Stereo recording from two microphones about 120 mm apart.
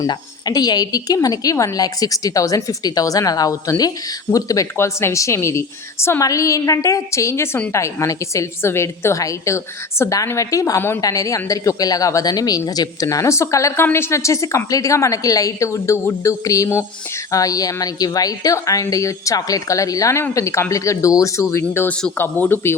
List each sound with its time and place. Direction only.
0.0 s a woman's voice: 35° left (ahead or behind)
21.6 s speech: 15° left (ahead or behind)